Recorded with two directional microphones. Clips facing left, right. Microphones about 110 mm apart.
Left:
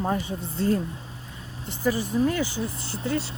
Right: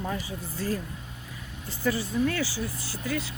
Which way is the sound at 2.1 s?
35° left (ahead or behind).